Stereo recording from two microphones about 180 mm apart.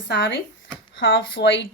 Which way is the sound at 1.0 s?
90° left.